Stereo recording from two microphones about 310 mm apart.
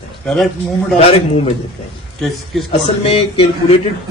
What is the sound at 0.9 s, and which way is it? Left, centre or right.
Speech, centre.